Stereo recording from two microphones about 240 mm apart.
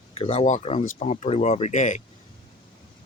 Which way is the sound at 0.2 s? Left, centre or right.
Left.